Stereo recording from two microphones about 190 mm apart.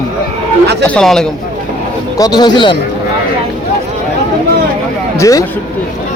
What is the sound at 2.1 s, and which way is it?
Speech, 20° left (ahead or behind).